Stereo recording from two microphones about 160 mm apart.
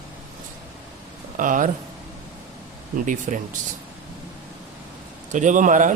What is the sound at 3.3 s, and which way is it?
Speech, 55° right (ahead or behind).